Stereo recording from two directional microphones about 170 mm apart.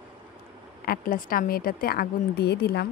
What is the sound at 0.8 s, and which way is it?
Speech, 60° left (ahead or behind).